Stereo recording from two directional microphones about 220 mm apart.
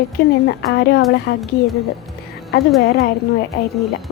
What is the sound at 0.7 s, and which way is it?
Speech, 45° left (ahead or behind).